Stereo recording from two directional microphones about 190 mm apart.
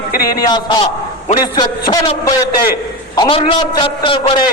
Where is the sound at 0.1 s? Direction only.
55° left (ahead or behind).